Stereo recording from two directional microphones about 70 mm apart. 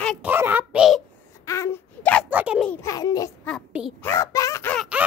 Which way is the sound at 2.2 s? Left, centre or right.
Right.